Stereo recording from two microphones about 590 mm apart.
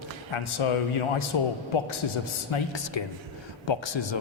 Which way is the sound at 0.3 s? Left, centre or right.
Left.